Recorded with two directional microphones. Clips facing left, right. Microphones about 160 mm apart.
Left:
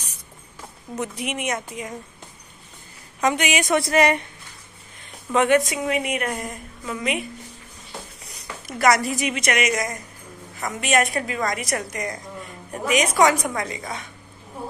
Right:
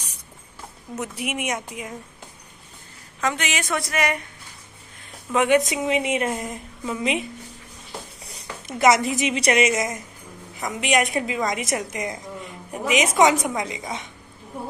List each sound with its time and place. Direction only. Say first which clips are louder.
0.9 s a woman's voice: left 1 dB; 5° right (ahead or behind)
3.2 s a woman's voice: left 4 dB; 15° left (ahead or behind)
3.8 s a woman's voice: left 7 dB; 35° left (ahead or behind)
5.3 s a woman's voice: left 1 dB; 10° right (ahead or behind)
5.7 s a woman's voice: right 2 dB; 20° right (ahead or behind)
8.3 s a woman's voice: right 1 dB; 20° right (ahead or behind)